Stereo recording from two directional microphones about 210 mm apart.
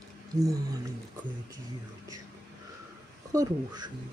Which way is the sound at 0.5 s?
15° right (ahead or behind).